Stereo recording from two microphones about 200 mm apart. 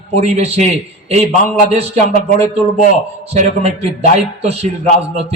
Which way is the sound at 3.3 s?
35° right (ahead or behind).